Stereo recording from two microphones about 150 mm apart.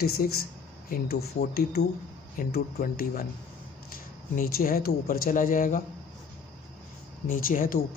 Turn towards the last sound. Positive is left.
turn(degrees=65)  # may be behind; listen again after turning